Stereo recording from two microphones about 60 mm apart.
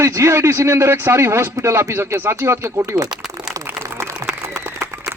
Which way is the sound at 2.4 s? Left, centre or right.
Right.